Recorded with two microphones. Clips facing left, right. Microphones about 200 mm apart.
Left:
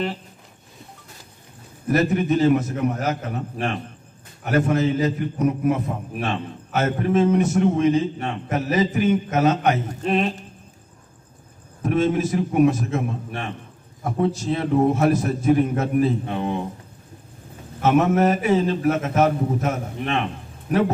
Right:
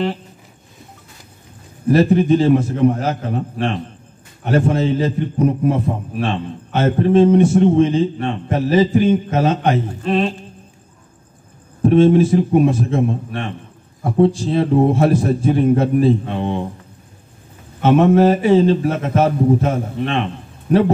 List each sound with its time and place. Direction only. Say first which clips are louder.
1.9 s a man's voice: right 7 dB; 30° right (ahead or behind)
11.8 s a man's voice: right 9 dB; 30° right (ahead or behind)
17.8 s a man's voice: right 6 dB; 30° right (ahead or behind)